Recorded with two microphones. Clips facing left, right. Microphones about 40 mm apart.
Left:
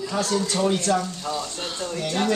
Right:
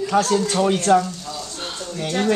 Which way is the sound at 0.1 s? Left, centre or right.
Right.